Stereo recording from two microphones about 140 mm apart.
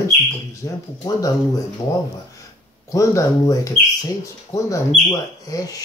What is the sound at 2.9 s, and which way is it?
Speech, 25° left (ahead or behind).